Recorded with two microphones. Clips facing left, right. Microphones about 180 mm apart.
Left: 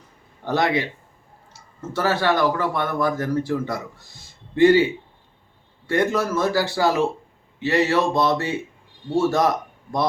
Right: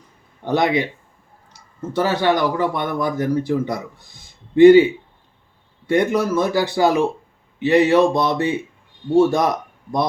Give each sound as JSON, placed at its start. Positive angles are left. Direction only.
{"t": 0.4, "sound": "speech", "side_deg": -15}
{"t": 1.9, "sound": "speech", "side_deg": -15}
{"t": 5.9, "sound": "speech", "side_deg": -15}